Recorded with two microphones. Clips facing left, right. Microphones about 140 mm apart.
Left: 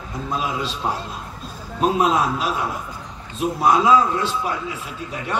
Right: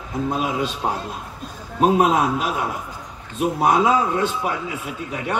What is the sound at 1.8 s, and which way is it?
A man's voice, 55° right (ahead or behind).